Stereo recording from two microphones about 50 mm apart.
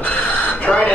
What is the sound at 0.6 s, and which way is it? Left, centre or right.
Speech, left.